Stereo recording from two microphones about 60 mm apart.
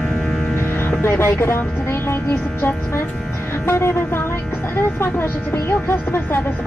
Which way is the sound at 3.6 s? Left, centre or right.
Left.